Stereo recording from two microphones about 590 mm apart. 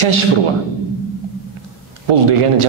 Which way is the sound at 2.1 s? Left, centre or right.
Right.